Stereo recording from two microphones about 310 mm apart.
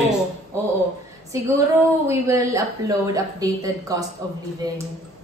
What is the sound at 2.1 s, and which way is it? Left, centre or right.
A woman's voice, centre.